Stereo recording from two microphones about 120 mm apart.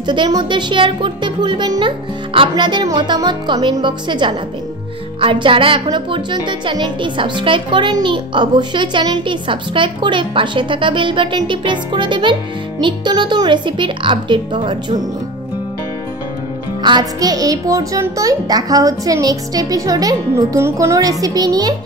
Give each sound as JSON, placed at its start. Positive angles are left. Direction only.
{"t": 0.0, "sound": "speech", "side_deg": -40}
{"t": 16.8, "sound": "speech", "side_deg": -35}